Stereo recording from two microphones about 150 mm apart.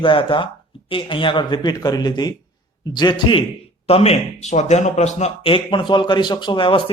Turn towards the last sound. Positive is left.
turn(degrees=35)  # may be behind; listen again after turning